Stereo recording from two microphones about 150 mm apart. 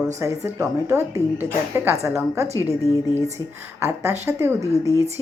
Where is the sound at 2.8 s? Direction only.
20° left (ahead or behind).